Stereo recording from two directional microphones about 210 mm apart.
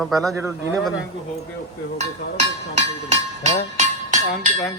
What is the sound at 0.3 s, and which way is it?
Speech, 15° right (ahead or behind).